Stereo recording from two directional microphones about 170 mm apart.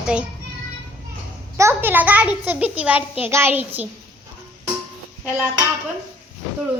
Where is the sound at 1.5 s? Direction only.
15° right (ahead or behind).